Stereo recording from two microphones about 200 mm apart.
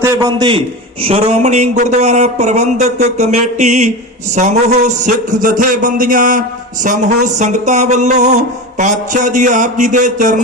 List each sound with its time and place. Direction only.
0.0 s a man's voice: 20° right (ahead or behind); by 10.4 s 40° right (ahead or behind)